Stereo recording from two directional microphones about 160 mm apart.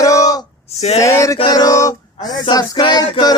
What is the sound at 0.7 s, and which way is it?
Speech, 40° left (ahead or behind).